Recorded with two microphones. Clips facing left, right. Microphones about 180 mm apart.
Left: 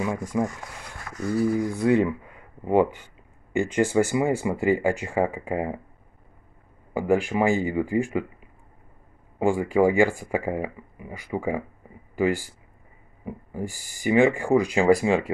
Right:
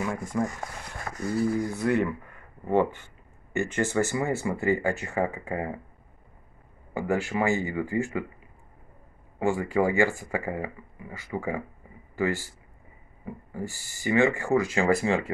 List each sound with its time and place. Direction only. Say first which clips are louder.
0.3 s speech: left 2 dB; 15° left (ahead or behind)
1.1 s a sound: right 1 dB; 35° right (ahead or behind)
1.7 s speech: left 4 dB; 15° left (ahead or behind)
6.9 s speech: left 5 dB; 15° left (ahead or behind)
9.4 s speech: left 4 dB; 15° left (ahead or behind)